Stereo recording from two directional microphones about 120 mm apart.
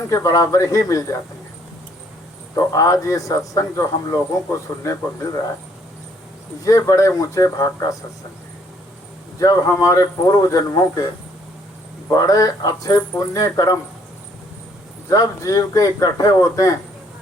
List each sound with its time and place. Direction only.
0.1 s speech: 25° left (ahead or behind)
2.6 s speech: 30° left (ahead or behind)
6.7 s speech: 25° left (ahead or behind)
9.4 s speech: 30° left (ahead or behind)
12.0 s speech: 30° left (ahead or behind)
15.1 s speech: 25° left (ahead or behind)